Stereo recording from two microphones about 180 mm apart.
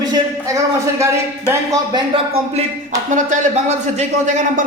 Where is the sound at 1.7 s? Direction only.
25° right (ahead or behind).